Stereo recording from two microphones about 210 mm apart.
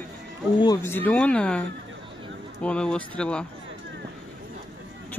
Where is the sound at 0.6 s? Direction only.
15° left (ahead or behind).